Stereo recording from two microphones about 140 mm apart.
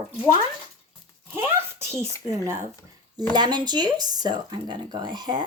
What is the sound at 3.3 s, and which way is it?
Speech, 30° right (ahead or behind).